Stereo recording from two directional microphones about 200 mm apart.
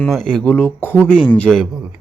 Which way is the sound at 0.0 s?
5° left (ahead or behind).